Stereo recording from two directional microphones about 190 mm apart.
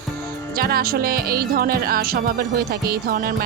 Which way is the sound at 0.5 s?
55° right (ahead or behind).